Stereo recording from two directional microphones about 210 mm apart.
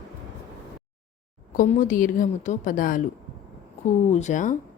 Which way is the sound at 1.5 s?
40° left (ahead or behind).